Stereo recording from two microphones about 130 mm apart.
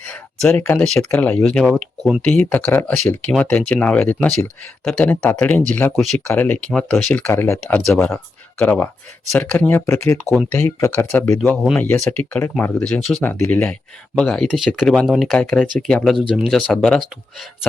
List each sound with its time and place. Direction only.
0.1 s a sound: 10° left (ahead or behind)
0.9 s speech: 10° left (ahead or behind)
6.0 s speech: centre (ahead or behind)
6.2 s speech: 15° left (ahead or behind)